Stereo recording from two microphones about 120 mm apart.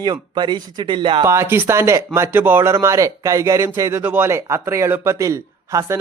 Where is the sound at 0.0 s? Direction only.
35° right (ahead or behind).